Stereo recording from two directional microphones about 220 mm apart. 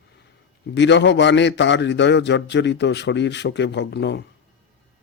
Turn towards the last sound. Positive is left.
turn(degrees=50)  # may be behind; listen again after turning